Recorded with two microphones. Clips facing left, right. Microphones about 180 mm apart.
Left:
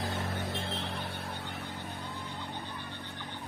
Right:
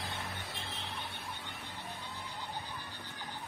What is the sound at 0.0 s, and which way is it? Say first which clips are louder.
Vehicle: left 8 dB; 45° left (ahead or behind).